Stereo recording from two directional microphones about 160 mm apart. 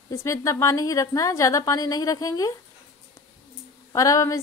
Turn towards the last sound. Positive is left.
turn(degrees=20)  # may be behind; listen again after turning